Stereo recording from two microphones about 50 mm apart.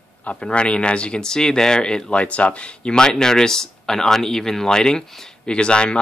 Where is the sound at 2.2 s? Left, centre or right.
Left.